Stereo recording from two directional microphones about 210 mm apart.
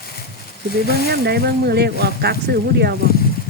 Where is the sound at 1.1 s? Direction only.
50° right (ahead or behind).